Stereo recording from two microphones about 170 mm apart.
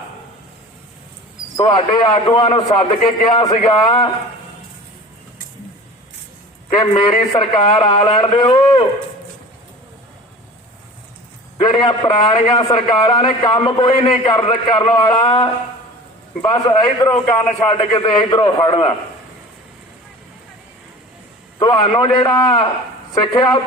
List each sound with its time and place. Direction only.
1.5 s a man's voice: 30° left (ahead or behind)
6.7 s a man's voice: 25° left (ahead or behind)
11.6 s a man's voice: 25° left (ahead or behind)
21.6 s a man's voice: 25° left (ahead or behind)